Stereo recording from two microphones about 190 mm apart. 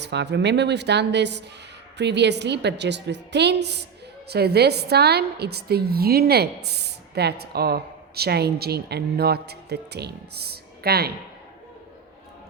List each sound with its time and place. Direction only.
0.0 s a woman's voice: 65° right (ahead or behind)